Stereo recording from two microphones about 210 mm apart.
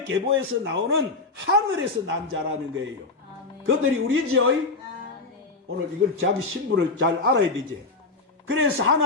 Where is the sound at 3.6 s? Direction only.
70° right (ahead or behind).